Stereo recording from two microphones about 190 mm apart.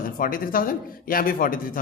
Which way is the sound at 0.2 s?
45° left (ahead or behind).